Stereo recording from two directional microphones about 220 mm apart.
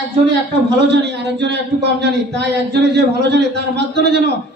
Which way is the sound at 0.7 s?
50° right (ahead or behind).